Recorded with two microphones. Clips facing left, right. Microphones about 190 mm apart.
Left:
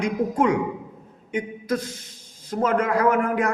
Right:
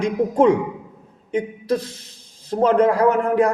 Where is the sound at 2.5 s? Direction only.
30° right (ahead or behind).